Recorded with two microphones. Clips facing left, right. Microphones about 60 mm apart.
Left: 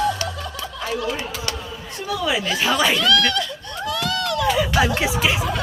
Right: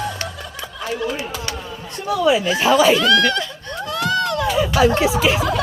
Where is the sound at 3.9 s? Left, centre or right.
Right.